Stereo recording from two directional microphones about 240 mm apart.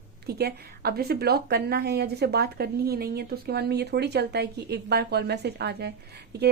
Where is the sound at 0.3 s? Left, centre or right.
Right.